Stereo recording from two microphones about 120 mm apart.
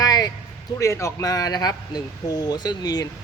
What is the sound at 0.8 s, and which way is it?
Speech, 25° left (ahead or behind).